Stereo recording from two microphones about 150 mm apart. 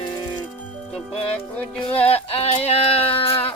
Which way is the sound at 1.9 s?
40° left (ahead or behind).